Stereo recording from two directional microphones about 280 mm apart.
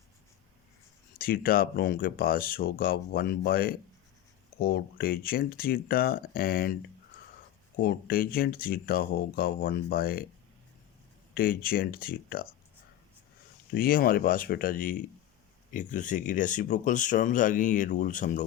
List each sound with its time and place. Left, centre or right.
1.2 s speech: left
7.8 s speech: left
11.3 s speech: left
13.7 s speech: left